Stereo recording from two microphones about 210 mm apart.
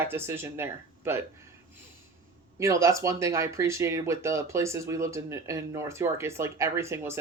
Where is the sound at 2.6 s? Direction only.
15° right (ahead or behind).